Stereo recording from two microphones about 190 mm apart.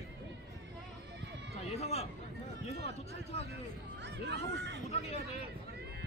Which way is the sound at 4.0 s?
65° right (ahead or behind).